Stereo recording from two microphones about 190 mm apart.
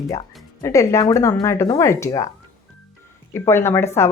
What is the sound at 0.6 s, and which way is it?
Speech, 15° left (ahead or behind).